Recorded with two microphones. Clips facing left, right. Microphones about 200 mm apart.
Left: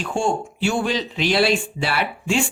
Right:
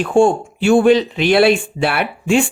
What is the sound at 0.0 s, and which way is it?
Speech, 55° right (ahead or behind).